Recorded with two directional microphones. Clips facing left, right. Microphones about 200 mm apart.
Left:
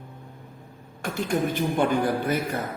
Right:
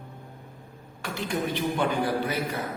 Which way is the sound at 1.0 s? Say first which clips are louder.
Left 4 dB; 50° left (ahead or behind).